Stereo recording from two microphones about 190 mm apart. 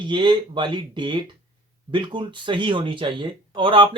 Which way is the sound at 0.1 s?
25° right (ahead or behind).